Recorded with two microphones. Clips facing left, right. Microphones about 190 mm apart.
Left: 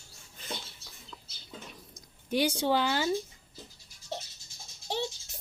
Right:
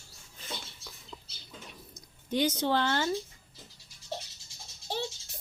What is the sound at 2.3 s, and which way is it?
Speech, 10° left (ahead or behind).